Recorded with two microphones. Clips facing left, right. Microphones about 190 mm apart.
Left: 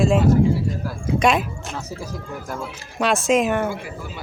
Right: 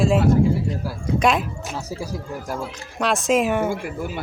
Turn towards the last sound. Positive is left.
turn(degrees=-5)  # may be behind; listen again after turning